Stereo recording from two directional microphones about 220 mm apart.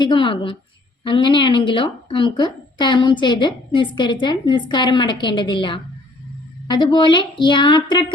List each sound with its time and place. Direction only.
0.0 s a woman's voice: 20° left (ahead or behind)